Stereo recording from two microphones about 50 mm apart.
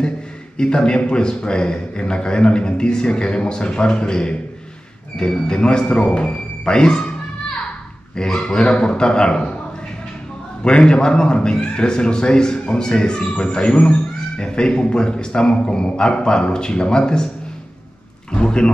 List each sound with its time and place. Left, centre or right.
0.6 s a man's voice: centre
10.6 s a man's voice: centre
18.3 s a man's voice: centre